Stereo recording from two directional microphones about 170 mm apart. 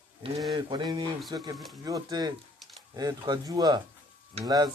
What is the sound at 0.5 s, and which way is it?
Speech, 30° right (ahead or behind).